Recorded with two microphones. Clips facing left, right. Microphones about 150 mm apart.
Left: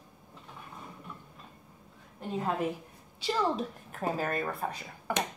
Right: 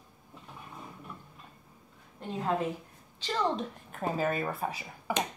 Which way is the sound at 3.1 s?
10° left (ahead or behind).